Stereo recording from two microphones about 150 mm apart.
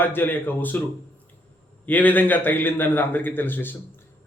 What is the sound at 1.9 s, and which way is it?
A man's voice, 10° left (ahead or behind).